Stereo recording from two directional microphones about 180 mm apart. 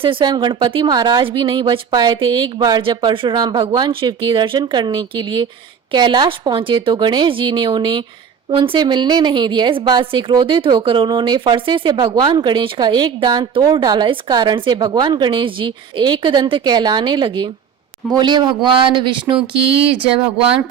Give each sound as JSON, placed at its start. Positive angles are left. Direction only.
{"t": 0.0, "sound": "a woman's voice", "side_deg": -30}